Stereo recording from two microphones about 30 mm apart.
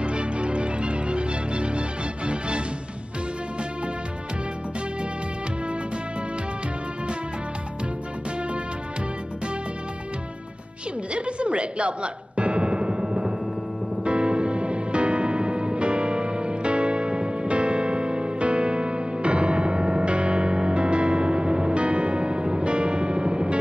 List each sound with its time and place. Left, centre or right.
0.0 s music: right
11.1 s music: right
13.0 s timpani: right
14.0 s music: right